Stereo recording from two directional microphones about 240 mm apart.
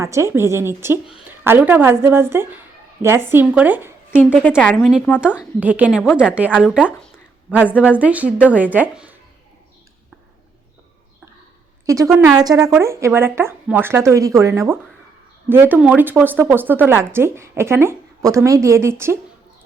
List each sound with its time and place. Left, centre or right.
0.0 s speech: centre
4.1 s speech: centre
6.3 s speech: centre
11.9 s speech: centre